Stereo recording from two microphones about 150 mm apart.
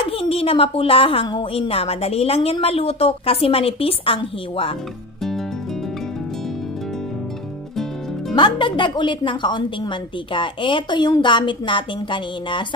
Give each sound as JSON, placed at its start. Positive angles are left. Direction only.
{"t": 0.0, "sound": "a woman's voice", "side_deg": 40}
{"t": 8.4, "sound": "a woman's voice", "side_deg": 30}